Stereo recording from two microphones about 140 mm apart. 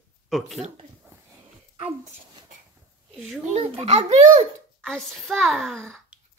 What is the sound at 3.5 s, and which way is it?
Speech, 45° right (ahead or behind).